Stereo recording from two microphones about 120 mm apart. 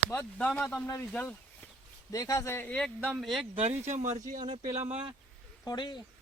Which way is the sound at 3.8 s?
80° right.